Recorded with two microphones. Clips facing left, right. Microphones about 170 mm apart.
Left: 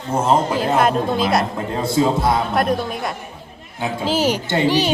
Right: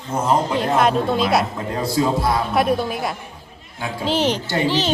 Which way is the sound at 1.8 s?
25° left (ahead or behind).